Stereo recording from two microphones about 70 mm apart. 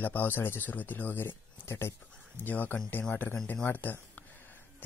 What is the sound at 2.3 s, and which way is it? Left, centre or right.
Speech, left.